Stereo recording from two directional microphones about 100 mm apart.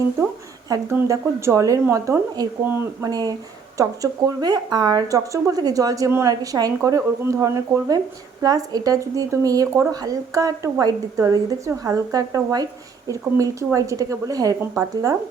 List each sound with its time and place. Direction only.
0.7 s speech: 35° right (ahead or behind)